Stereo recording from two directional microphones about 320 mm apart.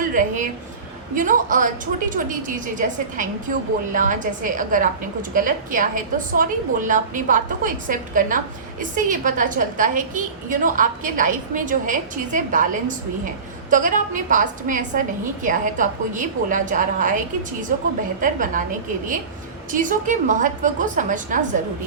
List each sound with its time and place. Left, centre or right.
0.1 s a woman's voice: right
13.7 s a woman's voice: right
19.7 s a woman's voice: right